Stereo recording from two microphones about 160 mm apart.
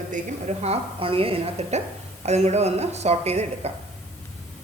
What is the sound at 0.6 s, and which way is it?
A woman's voice, 35° right (ahead or behind).